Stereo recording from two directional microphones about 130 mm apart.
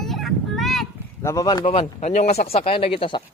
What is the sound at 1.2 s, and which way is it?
Speech, 25° left (ahead or behind).